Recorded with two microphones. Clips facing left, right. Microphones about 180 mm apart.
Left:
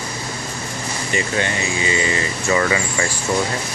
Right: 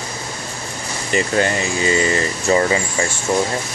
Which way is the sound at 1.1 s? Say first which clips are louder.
Right 5 dB; 45° right (ahead or behind).